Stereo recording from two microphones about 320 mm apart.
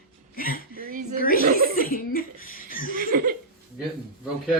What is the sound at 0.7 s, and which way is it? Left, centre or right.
Speech, right.